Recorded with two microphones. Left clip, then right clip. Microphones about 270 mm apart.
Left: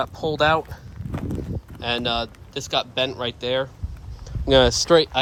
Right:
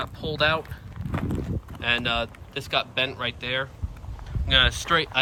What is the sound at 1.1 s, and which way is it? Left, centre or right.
Speech, centre.